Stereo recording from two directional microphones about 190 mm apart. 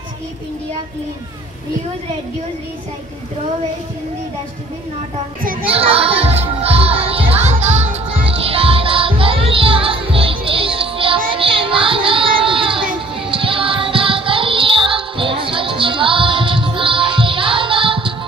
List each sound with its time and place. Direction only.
5.7 s music: 30° right (ahead or behind)